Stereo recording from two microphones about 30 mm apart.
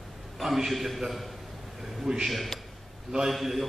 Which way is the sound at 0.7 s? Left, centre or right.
Centre.